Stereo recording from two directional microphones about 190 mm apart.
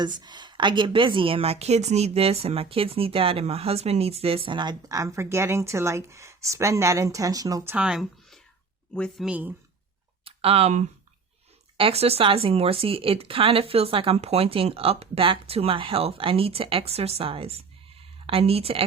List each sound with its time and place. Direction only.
0.0 s a woman's voice: 25° right (ahead or behind); by 9.5 s 5° right (ahead or behind)
10.2 s a woman's voice: 30° right (ahead or behind)